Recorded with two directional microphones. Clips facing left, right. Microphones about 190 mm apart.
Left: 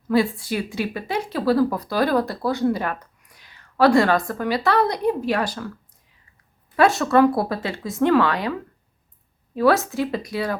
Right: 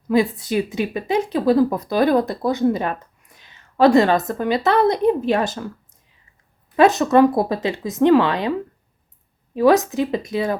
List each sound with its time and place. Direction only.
0.1 s speech: 20° right (ahead or behind)
6.7 s speech: 20° right (ahead or behind)
9.6 s speech: 20° right (ahead or behind)